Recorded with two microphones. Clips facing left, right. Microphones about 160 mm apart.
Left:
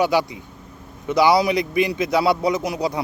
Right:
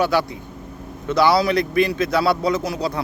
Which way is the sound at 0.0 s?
15° left (ahead or behind).